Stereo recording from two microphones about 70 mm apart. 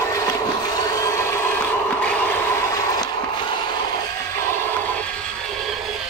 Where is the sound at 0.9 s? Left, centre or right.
Left.